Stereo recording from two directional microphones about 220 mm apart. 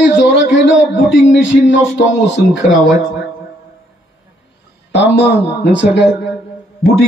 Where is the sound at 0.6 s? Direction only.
55° left (ahead or behind).